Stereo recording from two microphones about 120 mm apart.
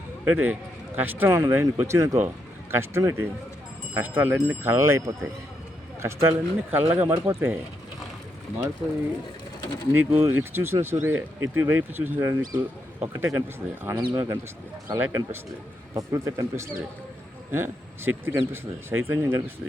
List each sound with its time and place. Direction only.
0.3 s speech: 15° right (ahead or behind)
9.9 s speech: 20° right (ahead or behind)